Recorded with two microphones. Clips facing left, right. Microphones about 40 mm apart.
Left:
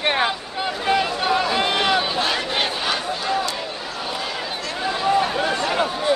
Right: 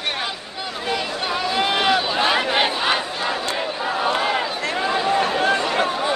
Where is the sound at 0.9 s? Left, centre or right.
Centre.